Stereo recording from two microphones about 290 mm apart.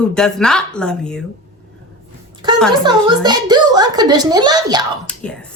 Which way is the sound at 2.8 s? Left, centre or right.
Centre.